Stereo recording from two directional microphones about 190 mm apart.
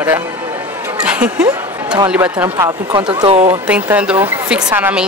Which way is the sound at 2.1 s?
10° right (ahead or behind).